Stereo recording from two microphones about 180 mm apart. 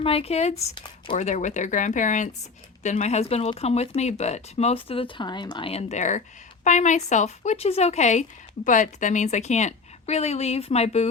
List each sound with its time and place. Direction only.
0.0 s speech: 35° left (ahead or behind)